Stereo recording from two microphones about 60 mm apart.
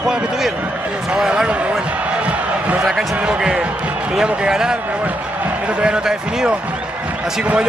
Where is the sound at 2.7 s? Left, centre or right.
Centre.